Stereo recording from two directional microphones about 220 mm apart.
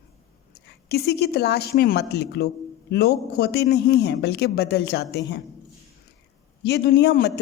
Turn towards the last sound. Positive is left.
turn(degrees=50)  # may be behind; listen again after turning